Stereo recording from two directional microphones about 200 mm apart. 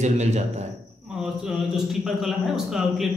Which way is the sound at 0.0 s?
35° right (ahead or behind).